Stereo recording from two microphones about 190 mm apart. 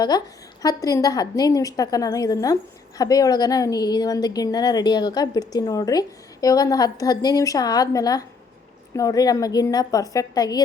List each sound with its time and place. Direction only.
0.6 s a woman's voice: 20° left (ahead or behind)